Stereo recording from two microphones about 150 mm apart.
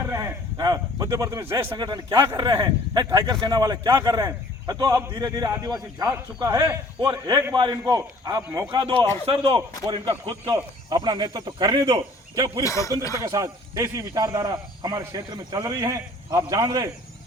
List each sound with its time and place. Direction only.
0.1 s a man's voice: 20° right (ahead or behind)
8.7 s speech: 35° right (ahead or behind)
10.4 s a man's voice: 25° right (ahead or behind)
12.6 s speech: 20° left (ahead or behind)
13.1 s a man's voice: 20° right (ahead or behind)